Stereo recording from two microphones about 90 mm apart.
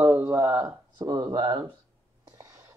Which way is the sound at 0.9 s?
50° right (ahead or behind).